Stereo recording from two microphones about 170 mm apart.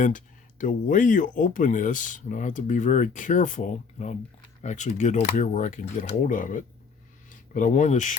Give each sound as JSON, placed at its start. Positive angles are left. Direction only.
{"t": 0.6, "sound": "speech", "side_deg": 50}